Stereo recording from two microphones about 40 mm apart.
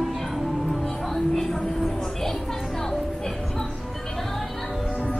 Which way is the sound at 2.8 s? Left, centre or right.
Centre.